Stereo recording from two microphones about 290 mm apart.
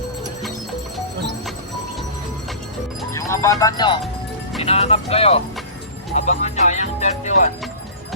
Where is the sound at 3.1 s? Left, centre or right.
Centre.